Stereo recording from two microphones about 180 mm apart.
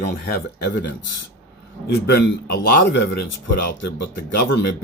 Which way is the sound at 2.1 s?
75° left (ahead or behind).